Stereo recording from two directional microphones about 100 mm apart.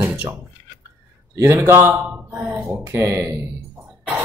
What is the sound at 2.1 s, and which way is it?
Mantra, 15° right (ahead or behind).